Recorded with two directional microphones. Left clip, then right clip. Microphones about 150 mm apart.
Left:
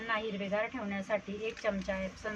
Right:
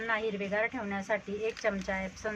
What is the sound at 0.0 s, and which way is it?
Speech, 15° right (ahead or behind).